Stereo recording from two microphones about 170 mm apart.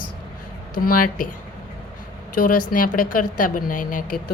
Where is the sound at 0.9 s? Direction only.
55° left (ahead or behind).